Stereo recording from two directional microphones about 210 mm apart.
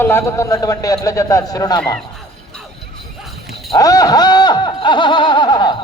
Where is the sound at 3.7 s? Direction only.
15° left (ahead or behind).